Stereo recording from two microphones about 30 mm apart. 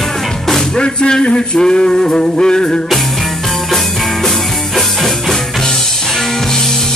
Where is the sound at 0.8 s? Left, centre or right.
Left.